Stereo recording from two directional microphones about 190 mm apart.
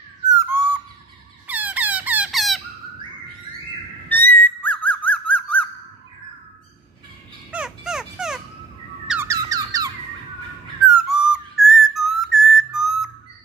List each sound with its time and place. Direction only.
0.3 s owl: 15° right (ahead or behind)
1.5 s squeak: 10° right (ahead or behind)
4.1 s whistle: 10° left (ahead or behind)
7.5 s dog: 5° right (ahead or behind)
9.1 s squeak: 15° right (ahead or behind)
11.0 s whistle: 5° right (ahead or behind)